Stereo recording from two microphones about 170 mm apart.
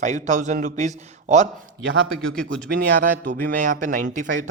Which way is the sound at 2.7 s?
55° right (ahead or behind).